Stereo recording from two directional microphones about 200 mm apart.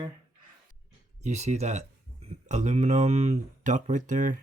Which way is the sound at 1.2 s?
35° right (ahead or behind).